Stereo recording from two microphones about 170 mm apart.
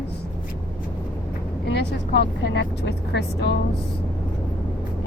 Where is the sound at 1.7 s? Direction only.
80° left.